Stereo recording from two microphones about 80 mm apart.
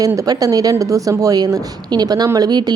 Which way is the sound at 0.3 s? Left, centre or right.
Right.